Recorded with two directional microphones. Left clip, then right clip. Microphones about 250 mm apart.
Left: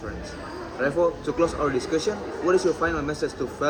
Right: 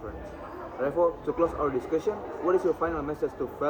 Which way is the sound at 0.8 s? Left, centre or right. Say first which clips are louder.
Left 3 dB; left.